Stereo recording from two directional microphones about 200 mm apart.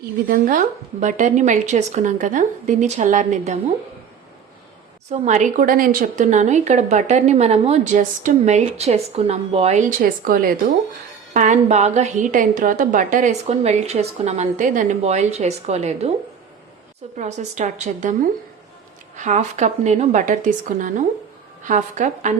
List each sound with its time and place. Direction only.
0.3 s a woman's voice: 40° right (ahead or behind)
5.1 s a woman's voice: 35° right (ahead or behind)
17.2 s a woman's voice: 35° right (ahead or behind)